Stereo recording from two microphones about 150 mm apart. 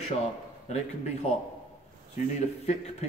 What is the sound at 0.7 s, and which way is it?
Speech, 50° left (ahead or behind).